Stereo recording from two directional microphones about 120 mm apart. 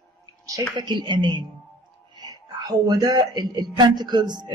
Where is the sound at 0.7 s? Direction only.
40° right (ahead or behind).